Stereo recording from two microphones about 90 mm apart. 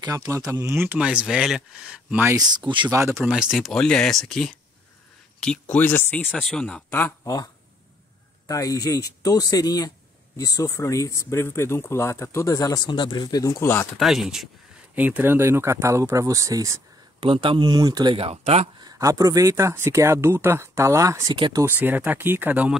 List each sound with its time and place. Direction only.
0.0 s speech: 45° right (ahead or behind)
0.3 s speech: 35° right (ahead or behind)
0.8 s speech: 10° right (ahead or behind)
2.3 s speech: 55° right (ahead or behind)
2.9 s speech: 35° right (ahead or behind)
3.3 s speech: 5° right (ahead or behind); by 6.2 s 25° left (ahead or behind)
6.3 s speech: 5° left (ahead or behind)
6.9 s speech: 20° left (ahead or behind)
8.5 s speech: 40° left (ahead or behind)
12.8 s speech: 55° left (ahead or behind)
13.6 s speech: 25° left (ahead or behind)
13.9 s speech: 5° right (ahead or behind)
15.0 s speech: 20° right (ahead or behind); by 16.8 s 35° right (ahead or behind)
17.2 s speech: 80° right; by 22.7 s 20° right (ahead or behind)